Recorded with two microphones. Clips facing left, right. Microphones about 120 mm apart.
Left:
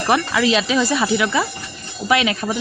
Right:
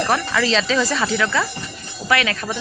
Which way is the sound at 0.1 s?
10° left (ahead or behind).